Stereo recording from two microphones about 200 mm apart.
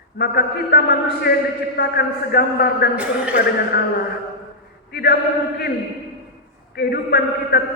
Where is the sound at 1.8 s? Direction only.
50° left (ahead or behind).